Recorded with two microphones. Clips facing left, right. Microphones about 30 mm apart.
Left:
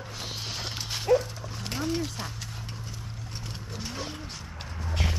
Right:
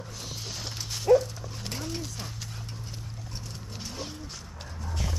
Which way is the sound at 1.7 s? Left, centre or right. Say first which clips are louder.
Left 6 dB; left.